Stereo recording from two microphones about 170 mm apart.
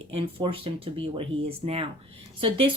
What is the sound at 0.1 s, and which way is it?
Speech, 30° right (ahead or behind).